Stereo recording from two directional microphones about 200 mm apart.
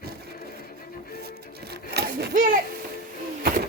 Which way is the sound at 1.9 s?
55° right (ahead or behind).